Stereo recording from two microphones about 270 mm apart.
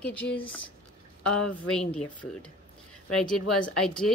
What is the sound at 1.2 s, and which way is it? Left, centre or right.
Speech, left.